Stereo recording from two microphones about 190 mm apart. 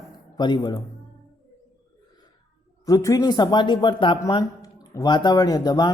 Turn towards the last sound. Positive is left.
turn(degrees=20)  # may be behind; listen again after turning